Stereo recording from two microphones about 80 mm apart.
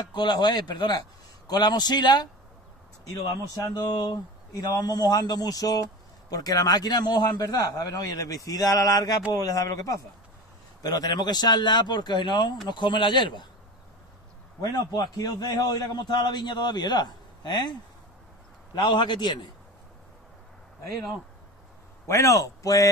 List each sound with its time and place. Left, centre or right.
0.1 s a man's voice: left
3.1 s a man's voice: left
10.8 s a man's voice: left
14.6 s a man's voice: left
18.9 s speech: left
22.0 s a man's voice: left